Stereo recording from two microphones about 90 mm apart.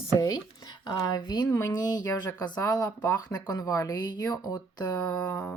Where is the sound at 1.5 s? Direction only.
30° left (ahead or behind).